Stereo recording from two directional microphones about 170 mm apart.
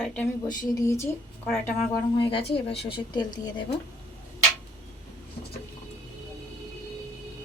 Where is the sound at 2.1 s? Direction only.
35° left (ahead or behind).